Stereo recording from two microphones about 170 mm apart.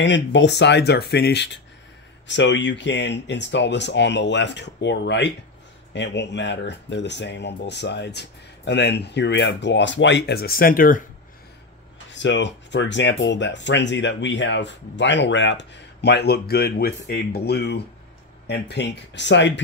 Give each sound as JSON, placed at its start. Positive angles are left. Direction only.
{"t": 0.0, "sound": "speech", "side_deg": 90}
{"t": 12.1, "sound": "speech", "side_deg": 90}
{"t": 18.5, "sound": "speech", "side_deg": 90}